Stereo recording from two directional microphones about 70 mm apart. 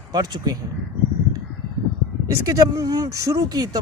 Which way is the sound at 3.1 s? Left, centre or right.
Right.